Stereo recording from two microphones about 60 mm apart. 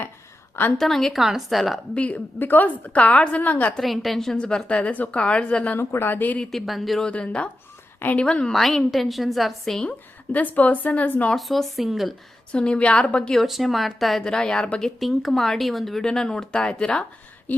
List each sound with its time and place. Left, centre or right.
0.8 s a woman's voice: centre
2.0 s a woman's voice: left
2.4 s a woman's voice: left
3.8 s a woman's voice: centre
4.4 s speech: centre
5.7 s speech: left
6.5 s a woman's voice: centre
7.0 s a woman's voice: centre
8.5 s a woman's voice: centre
10.3 s a woman's voice: left
11.3 s a woman's voice: centre
12.5 s a woman's voice: centre
13.3 s a woman's voice: centre; by 17.6 s left